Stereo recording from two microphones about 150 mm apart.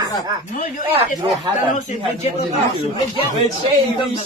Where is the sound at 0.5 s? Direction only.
60° left (ahead or behind).